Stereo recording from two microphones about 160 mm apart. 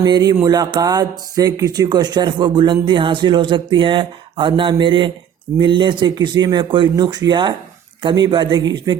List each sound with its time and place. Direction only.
0.0 s speech: 25° right (ahead or behind)